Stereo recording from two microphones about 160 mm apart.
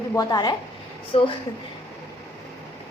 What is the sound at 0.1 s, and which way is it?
Speech, 25° left (ahead or behind).